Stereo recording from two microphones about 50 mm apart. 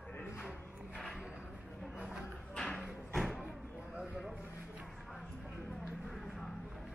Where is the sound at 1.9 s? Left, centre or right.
Centre.